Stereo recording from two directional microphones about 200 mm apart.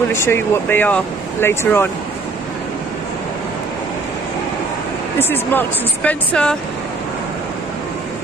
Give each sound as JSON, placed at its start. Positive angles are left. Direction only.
{"t": 0.1, "sound": "speech", "side_deg": 10}
{"t": 5.2, "sound": "speech", "side_deg": 10}